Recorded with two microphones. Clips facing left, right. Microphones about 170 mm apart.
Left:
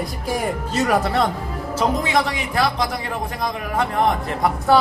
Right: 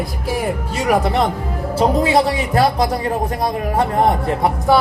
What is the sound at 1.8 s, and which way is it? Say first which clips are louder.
A man's voice: right 5 dB; 35° right (ahead or behind).